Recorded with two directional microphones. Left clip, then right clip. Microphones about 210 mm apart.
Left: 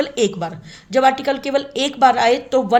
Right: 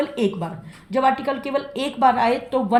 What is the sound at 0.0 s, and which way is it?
A woman's voice, 45° left (ahead or behind).